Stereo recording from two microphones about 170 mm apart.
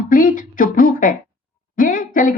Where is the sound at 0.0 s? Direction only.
55° left (ahead or behind).